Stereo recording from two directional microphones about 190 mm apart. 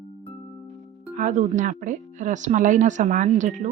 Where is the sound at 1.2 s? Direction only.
40° right (ahead or behind).